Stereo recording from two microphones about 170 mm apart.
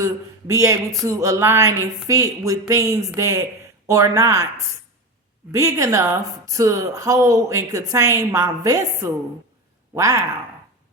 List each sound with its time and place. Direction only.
0.0 s speech: 20° right (ahead or behind)
1.0 s a sound: 20° right (ahead or behind)
2.0 s a woman's voice: 20° right (ahead or behind)
5.5 s a woman's voice: 20° right (ahead or behind)